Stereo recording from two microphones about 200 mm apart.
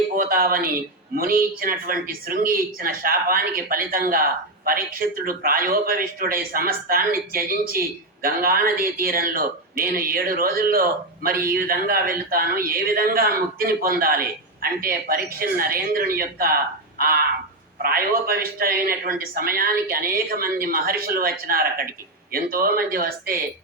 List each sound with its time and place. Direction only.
0.2 s speech: 45° right (ahead or behind)